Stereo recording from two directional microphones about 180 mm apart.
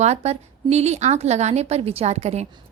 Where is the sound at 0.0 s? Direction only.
40° right (ahead or behind).